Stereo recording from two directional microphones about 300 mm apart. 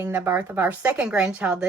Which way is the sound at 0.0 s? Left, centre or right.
Centre.